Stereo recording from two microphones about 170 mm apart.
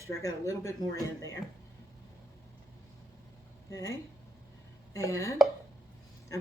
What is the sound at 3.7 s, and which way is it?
Speech, 20° left (ahead or behind).